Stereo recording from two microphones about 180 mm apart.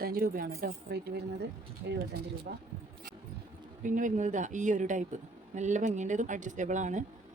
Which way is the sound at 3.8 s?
45° right (ahead or behind).